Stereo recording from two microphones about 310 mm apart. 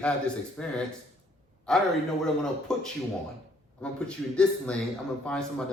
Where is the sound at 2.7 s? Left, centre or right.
Centre.